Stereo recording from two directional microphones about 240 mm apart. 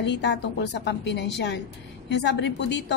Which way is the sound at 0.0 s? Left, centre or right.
Left.